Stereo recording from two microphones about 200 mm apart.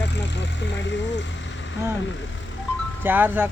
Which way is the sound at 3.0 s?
10° right (ahead or behind).